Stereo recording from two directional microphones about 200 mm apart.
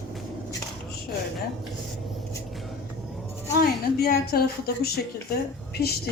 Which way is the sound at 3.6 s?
50° left (ahead or behind).